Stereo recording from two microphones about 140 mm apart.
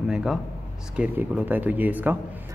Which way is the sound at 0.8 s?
10° right (ahead or behind).